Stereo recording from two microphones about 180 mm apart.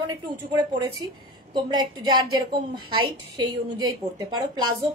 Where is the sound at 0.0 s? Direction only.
25° right (ahead or behind).